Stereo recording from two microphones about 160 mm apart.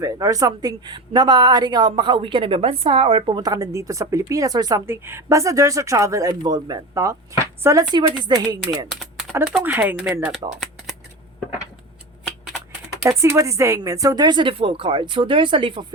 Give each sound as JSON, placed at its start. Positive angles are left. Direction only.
{"t": 0.0, "sound": "speech", "side_deg": -20}
{"t": 8.9, "sound": "typing", "side_deg": 0}
{"t": 9.6, "sound": "speech", "side_deg": -10}
{"t": 12.2, "sound": "typing", "side_deg": 0}
{"t": 13.1, "sound": "speech", "side_deg": -20}